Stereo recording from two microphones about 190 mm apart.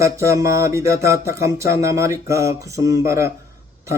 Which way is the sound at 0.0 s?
15° right (ahead or behind).